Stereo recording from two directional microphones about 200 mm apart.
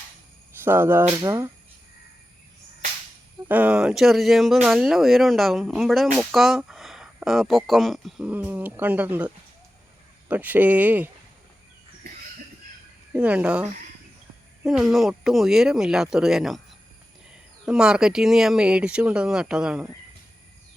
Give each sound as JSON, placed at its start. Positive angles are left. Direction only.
{"t": 0.6, "sound": "speech", "side_deg": -10}
{"t": 3.5, "sound": "speech", "side_deg": -5}
{"t": 13.1, "sound": "speech", "side_deg": -5}
{"t": 17.7, "sound": "speech", "side_deg": -5}